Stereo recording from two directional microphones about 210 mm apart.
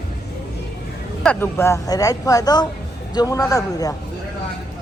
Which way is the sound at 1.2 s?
10° left (ahead or behind).